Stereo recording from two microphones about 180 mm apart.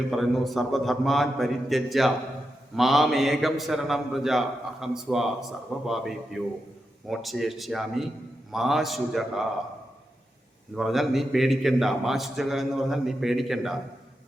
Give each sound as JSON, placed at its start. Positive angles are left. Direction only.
{"t": 0.1, "sound": "a man's voice", "side_deg": 0}
{"t": 10.8, "sound": "a man's voice", "side_deg": 0}